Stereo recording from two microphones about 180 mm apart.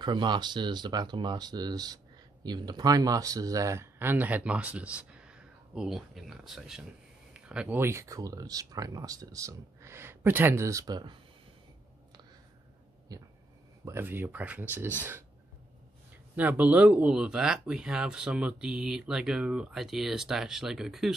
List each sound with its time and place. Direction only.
0.0 s speech: 25° right (ahead or behind)
13.1 s a sound: 20° right (ahead or behind)
13.8 s speech: 10° right (ahead or behind)
16.3 s speech: 10° right (ahead or behind)